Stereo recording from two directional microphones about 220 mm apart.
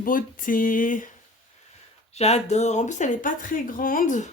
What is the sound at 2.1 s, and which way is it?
Speech, 30° left (ahead or behind).